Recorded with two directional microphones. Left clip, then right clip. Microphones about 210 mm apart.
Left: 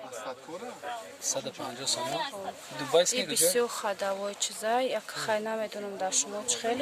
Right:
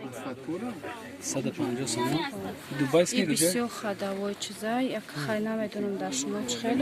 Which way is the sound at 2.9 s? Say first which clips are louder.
Even; 20° left (ahead or behind).